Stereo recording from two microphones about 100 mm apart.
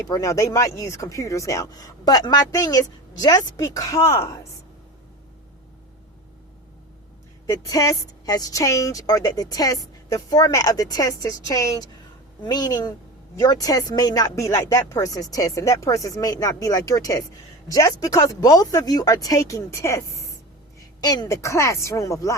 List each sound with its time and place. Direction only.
0.1 s a woman's voice: 35° left (ahead or behind)
7.4 s a woman's voice: 35° left (ahead or behind)